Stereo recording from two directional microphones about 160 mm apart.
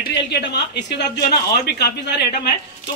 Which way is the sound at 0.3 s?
90° left.